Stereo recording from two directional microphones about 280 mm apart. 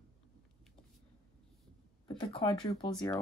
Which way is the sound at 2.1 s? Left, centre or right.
Centre.